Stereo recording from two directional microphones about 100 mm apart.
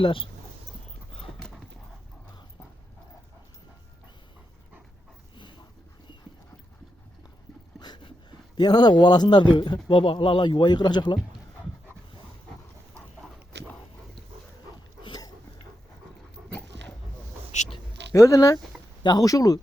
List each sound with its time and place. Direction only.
0.0 s speech: 65° left (ahead or behind)
1.4 s a sound: centre (ahead or behind)
5.3 s dog: 50° left (ahead or behind)
7.8 s speech: 50° left (ahead or behind)
10.0 s speech: 65° left (ahead or behind); by 11.2 s 50° left (ahead or behind)
15.0 s a sound: 40° left (ahead or behind)
16.5 s dog: 15° left (ahead or behind)
18.1 s speech: 30° left (ahead or behind)